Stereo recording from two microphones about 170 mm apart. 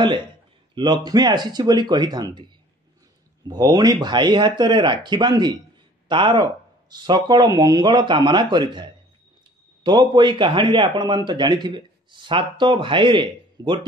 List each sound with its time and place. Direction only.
0.7 s a man's voice: 25° right (ahead or behind)
3.4 s a man's voice: 25° right (ahead or behind)